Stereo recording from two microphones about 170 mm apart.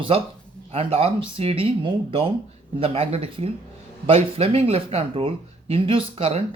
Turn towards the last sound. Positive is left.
turn(degrees=-35)  # may be behind; listen again after turning